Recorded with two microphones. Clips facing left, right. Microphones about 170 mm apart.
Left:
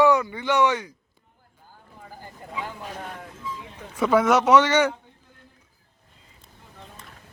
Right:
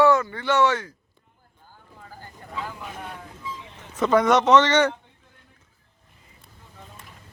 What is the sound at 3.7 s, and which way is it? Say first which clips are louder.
Speech: even; 10° left (ahead or behind).